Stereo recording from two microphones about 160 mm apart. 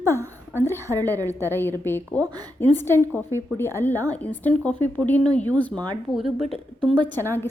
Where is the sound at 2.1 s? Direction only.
25° right (ahead or behind).